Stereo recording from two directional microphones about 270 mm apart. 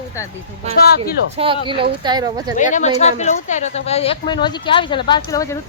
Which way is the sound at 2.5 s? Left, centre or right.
Left.